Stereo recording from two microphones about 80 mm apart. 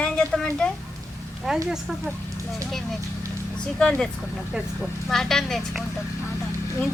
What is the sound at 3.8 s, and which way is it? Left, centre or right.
Speech, centre.